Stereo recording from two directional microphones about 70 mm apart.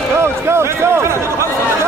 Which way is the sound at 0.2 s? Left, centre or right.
Right.